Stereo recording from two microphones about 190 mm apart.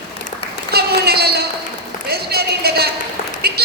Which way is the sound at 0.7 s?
55° right (ahead or behind).